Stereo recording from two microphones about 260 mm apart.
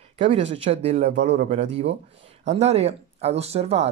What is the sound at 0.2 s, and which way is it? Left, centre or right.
Speech, right.